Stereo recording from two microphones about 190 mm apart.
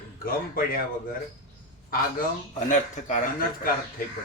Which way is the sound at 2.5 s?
40° left (ahead or behind).